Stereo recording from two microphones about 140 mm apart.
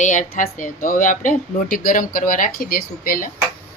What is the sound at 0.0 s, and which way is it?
Speech, 60° left (ahead or behind).